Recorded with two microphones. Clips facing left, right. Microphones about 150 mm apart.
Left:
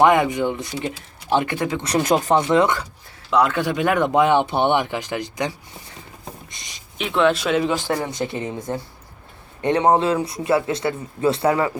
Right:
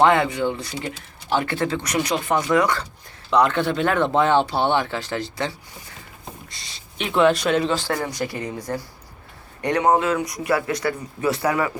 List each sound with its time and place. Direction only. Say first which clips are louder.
0.0 s speech: left 2 dB; 15° left (ahead or behind)
1.8 s a man's voice: left 3 dB; 30° left (ahead or behind)
2.0 s speech: left 7 dB; 40° left (ahead or behind)
2.4 s a man's voice: left 2 dB; 25° left (ahead or behind)
3.2 s speech: even; 5° left (ahead or behind)
6.5 s a sound: left 1 dB; 20° left (ahead or behind)
7.0 s speech: right 1 dB; centre (ahead or behind)
7.7 s a man's voice: left 1 dB; 20° left (ahead or behind)